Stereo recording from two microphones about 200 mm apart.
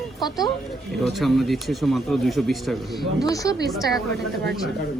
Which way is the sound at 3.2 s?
15° left (ahead or behind).